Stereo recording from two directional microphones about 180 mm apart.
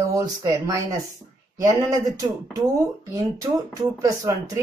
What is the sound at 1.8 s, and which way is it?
Speech, 15° right (ahead or behind).